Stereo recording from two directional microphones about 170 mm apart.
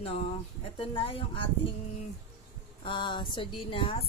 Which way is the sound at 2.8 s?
30° left (ahead or behind).